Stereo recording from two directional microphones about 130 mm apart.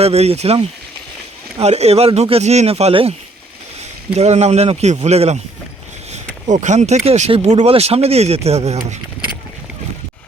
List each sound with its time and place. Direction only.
0.0 s speech: 50° right (ahead or behind)
4.2 s speech: 55° right (ahead or behind)
6.5 s speech: 65° right (ahead or behind)